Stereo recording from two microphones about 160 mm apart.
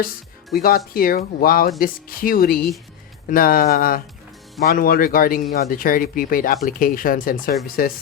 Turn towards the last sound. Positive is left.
turn(degrees=65)  # may be behind; listen again after turning